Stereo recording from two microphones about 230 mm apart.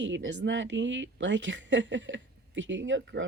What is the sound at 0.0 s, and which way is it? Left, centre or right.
A woman's voice, right.